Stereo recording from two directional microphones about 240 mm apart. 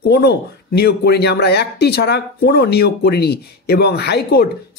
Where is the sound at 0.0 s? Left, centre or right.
Left.